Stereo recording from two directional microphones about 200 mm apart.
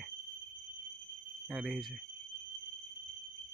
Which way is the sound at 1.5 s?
Centre (ahead or behind).